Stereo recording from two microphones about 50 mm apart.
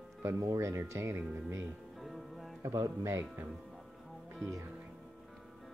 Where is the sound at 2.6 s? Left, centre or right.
Right.